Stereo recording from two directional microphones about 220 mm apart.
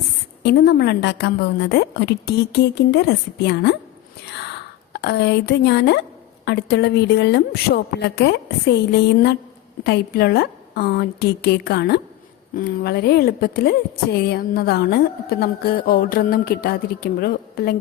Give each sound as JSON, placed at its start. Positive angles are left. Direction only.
{"t": 0.4, "sound": "a woman's voice", "side_deg": 45}
{"t": 4.9, "sound": "a woman's voice", "side_deg": 50}